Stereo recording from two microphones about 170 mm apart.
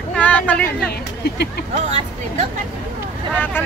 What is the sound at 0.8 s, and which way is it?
Speech, 70° left (ahead or behind).